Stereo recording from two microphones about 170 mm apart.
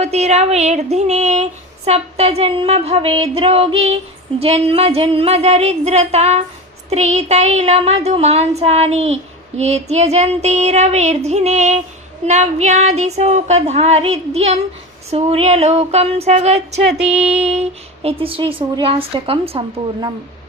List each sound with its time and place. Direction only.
0.0 s female singing: 40° right (ahead or behind)